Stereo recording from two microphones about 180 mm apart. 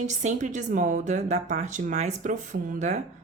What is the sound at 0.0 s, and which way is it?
A woman's voice, 40° right (ahead or behind).